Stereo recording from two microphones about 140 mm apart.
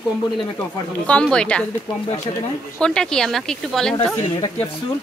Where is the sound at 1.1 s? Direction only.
5° left (ahead or behind).